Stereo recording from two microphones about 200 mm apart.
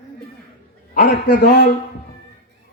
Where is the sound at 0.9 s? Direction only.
45° left (ahead or behind).